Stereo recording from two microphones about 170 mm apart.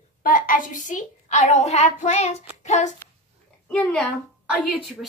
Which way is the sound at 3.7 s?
5° left (ahead or behind).